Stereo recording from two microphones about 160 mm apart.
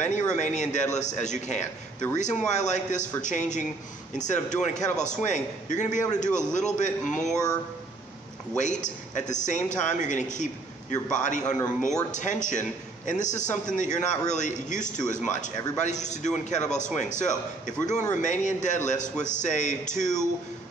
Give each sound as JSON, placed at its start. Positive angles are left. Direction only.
{"t": 0.0, "sound": "a man's voice", "side_deg": 50}
{"t": 8.5, "sound": "a man's voice", "side_deg": 50}